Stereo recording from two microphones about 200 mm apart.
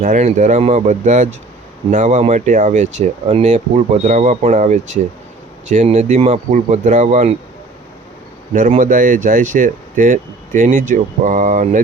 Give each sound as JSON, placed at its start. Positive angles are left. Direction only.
{"t": 0.0, "sound": "speech", "side_deg": -35}
{"t": 8.5, "sound": "speech", "side_deg": -40}